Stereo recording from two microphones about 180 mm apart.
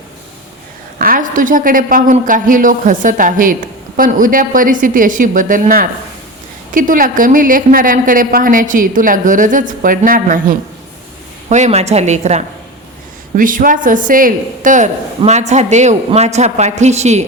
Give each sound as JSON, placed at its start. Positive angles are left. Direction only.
{"t": 0.9, "sound": "a woman's voice", "side_deg": -50}